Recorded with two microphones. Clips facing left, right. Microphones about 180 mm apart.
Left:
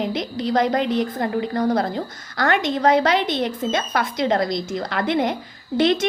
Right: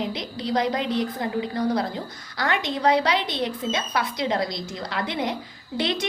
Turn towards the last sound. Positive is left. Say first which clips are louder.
# left 8 dB
turn(degrees=50)  # may be behind; listen again after turning